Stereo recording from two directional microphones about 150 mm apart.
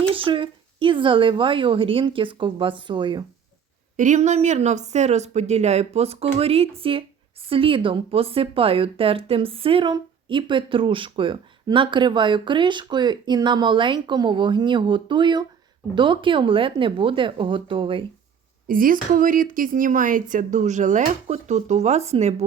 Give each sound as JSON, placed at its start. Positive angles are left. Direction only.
{"t": 0.1, "sound": "a woman's voice", "side_deg": -35}
{"t": 3.9, "sound": "a woman's voice", "side_deg": -55}
{"t": 18.7, "sound": "a woman's voice", "side_deg": -65}